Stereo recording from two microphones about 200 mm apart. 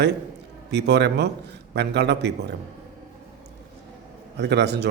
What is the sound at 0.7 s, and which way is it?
Speech, 60° right (ahead or behind).